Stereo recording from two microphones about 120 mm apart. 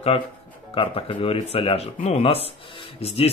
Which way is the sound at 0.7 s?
45° left (ahead or behind).